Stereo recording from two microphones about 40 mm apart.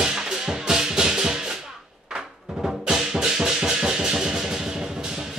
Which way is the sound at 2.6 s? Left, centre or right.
Centre.